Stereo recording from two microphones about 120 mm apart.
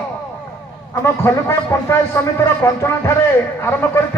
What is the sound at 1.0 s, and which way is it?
A man's voice, 25° left (ahead or behind).